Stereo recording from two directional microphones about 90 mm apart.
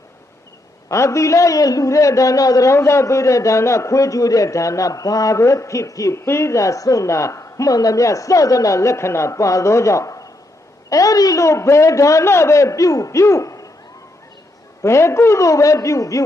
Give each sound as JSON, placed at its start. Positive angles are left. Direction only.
{"t": 0.9, "sound": "a man's voice", "side_deg": 35}
{"t": 14.8, "sound": "a man's voice", "side_deg": 30}